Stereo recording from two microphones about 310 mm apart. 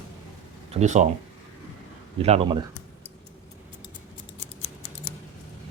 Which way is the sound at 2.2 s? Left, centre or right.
Centre.